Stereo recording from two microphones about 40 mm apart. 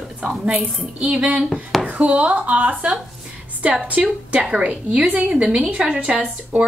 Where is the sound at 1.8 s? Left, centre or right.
Right.